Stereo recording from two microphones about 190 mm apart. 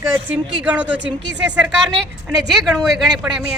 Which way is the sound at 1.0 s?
70° right (ahead or behind).